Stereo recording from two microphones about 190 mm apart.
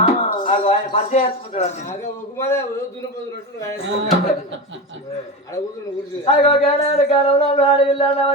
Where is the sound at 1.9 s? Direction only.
15° left (ahead or behind).